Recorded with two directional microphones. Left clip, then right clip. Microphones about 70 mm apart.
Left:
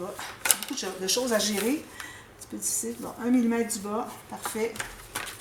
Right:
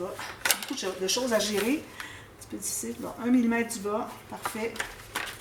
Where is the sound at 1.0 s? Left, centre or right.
Left.